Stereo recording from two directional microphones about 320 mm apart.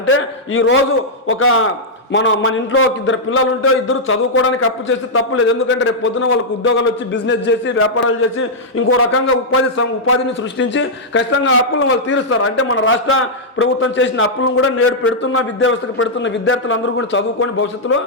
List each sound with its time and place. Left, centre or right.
0.1 s a man's voice: left
10.6 s a man's voice: left